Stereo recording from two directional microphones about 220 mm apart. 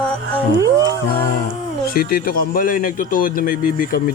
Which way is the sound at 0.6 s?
15° right (ahead or behind).